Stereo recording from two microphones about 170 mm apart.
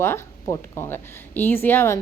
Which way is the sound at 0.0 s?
20° left (ahead or behind).